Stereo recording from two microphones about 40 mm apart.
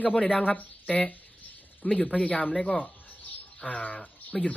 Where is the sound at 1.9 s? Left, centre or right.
Left.